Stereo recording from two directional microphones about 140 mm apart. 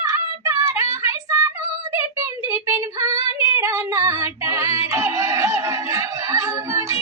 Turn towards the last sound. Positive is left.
turn(degrees=-20)  # may be behind; listen again after turning